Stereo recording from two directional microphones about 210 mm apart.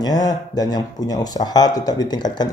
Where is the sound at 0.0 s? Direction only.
15° left (ahead or behind).